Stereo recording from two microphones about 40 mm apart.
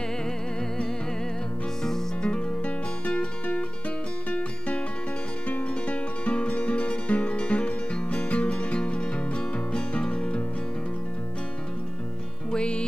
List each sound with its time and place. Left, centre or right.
1.8 s music: centre
2.2 s music: left
5.9 s music: left
12.4 s music: left